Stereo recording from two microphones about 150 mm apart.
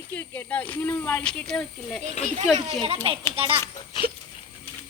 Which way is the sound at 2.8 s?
40° right (ahead or behind).